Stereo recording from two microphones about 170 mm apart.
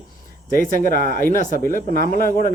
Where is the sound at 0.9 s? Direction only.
55° left (ahead or behind).